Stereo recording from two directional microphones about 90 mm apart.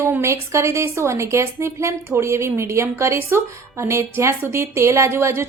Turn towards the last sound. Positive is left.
turn(degrees=-30)  # may be behind; listen again after turning